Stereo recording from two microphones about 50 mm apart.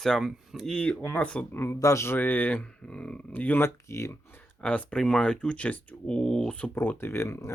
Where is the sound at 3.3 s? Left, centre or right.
Left.